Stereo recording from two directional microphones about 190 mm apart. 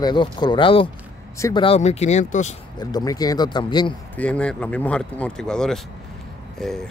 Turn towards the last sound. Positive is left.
turn(degrees=5)  # may be behind; listen again after turning